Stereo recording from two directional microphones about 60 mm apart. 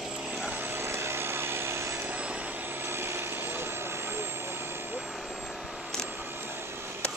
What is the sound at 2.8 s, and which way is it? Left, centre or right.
Vehicle, right.